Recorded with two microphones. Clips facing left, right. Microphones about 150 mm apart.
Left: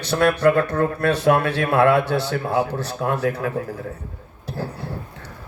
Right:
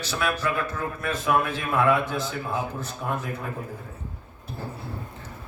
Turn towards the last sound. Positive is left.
turn(degrees=75)  # may be behind; listen again after turning